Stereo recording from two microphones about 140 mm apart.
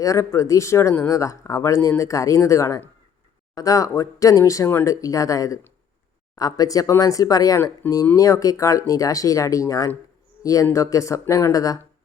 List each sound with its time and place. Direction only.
0.0 s speech: 25° left (ahead or behind)